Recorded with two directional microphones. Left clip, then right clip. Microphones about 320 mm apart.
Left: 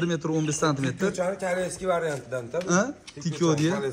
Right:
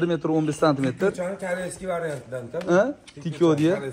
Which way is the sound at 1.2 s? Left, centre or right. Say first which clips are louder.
Left 1 dB; centre.